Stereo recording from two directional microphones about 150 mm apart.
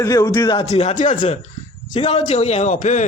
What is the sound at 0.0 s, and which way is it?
Speech, 20° left (ahead or behind).